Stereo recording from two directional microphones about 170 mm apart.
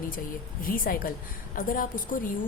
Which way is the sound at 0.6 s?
55° left (ahead or behind).